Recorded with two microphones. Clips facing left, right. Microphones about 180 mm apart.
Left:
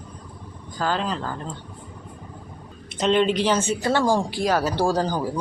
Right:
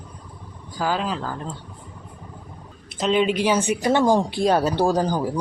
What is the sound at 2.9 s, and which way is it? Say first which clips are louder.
Speech: even; 5° right (ahead or behind).